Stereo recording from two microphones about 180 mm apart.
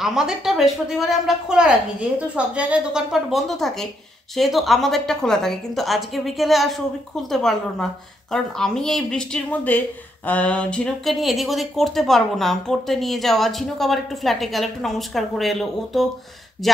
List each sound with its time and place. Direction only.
0.0 s a woman's voice: 5° right (ahead or behind)